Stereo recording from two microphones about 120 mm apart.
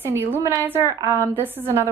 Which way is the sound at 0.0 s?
20° right (ahead or behind).